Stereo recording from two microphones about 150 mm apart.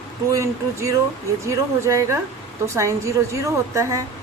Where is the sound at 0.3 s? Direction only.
20° right (ahead or behind).